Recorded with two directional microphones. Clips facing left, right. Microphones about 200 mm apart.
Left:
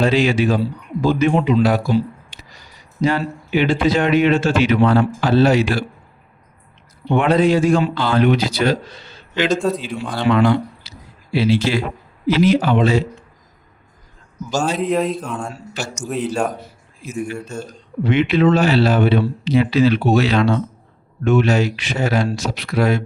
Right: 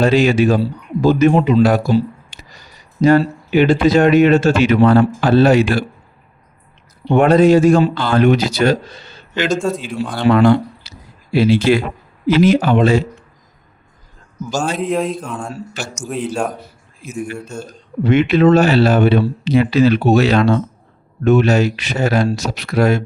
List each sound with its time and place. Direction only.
0.0 s speech: 45° right (ahead or behind)
7.1 s speech: 45° right (ahead or behind)
9.6 s speech: centre (ahead or behind)
10.3 s a sound: 50° right (ahead or behind)
12.3 s speech: 50° right (ahead or behind)
14.5 s speech: centre (ahead or behind)
18.0 s speech: 45° right (ahead or behind)